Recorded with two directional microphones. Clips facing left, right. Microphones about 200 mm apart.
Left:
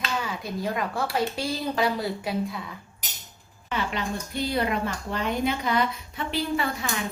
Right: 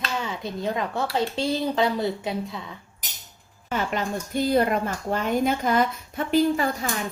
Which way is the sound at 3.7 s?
45° right (ahead or behind).